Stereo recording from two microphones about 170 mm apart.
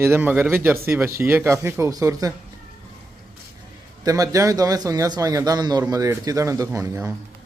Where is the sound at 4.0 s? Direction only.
20° right (ahead or behind).